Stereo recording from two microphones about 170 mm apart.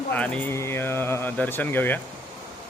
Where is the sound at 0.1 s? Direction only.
10° left (ahead or behind).